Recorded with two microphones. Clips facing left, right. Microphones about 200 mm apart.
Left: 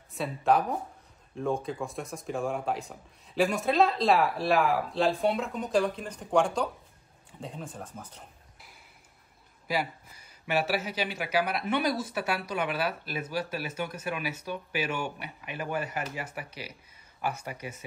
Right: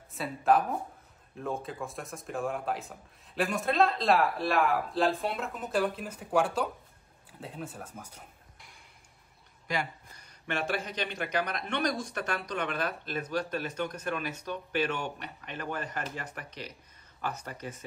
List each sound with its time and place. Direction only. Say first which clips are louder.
0.1 s speech: even; centre (ahead or behind)
9.7 s speech: left 3 dB; 5° left (ahead or behind)